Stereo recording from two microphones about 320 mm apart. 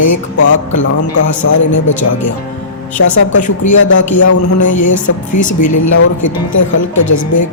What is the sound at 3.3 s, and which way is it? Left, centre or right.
A woman's voice, left.